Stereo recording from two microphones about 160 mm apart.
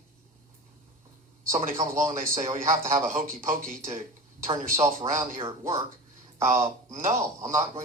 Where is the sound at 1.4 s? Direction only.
50° right (ahead or behind).